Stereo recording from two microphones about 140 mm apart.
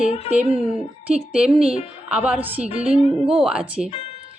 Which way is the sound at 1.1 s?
5° right (ahead or behind).